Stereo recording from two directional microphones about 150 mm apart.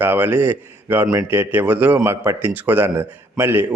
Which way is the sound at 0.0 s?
15° right (ahead or behind).